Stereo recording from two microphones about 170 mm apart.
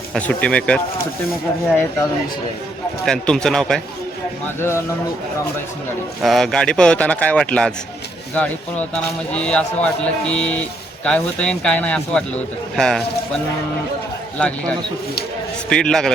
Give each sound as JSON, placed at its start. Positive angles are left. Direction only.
{"t": 0.1, "sound": "speech", "side_deg": 10}
{"t": 3.1, "sound": "speech", "side_deg": 5}
{"t": 4.4, "sound": "speech", "side_deg": 15}
{"t": 6.2, "sound": "speech", "side_deg": 0}
{"t": 9.3, "sound": "speech", "side_deg": 5}
{"t": 14.3, "sound": "speech", "side_deg": 5}